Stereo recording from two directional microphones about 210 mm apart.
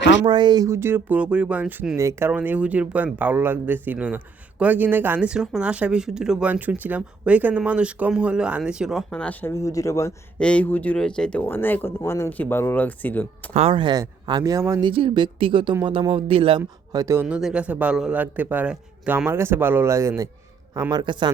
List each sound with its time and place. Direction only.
0.3 s speech: 20° right (ahead or behind); by 13.2 s 10° left (ahead or behind)
13.5 s speech: 30° right (ahead or behind)